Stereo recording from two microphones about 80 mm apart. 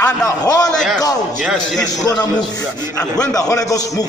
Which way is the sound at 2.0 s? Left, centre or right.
Left.